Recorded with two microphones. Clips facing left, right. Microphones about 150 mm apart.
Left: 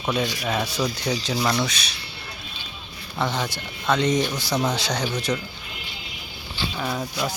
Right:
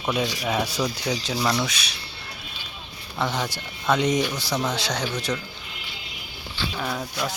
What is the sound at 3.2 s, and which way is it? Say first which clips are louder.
Speech: left 1 dB; 5° right (ahead or behind).